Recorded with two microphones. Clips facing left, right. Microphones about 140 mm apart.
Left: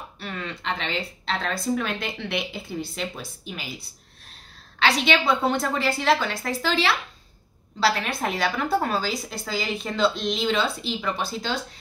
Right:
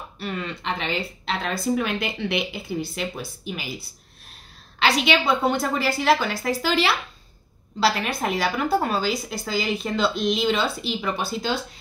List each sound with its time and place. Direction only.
0.2 s a woman's voice: 5° right (ahead or behind)
4.8 s a woman's voice: 5° right (ahead or behind)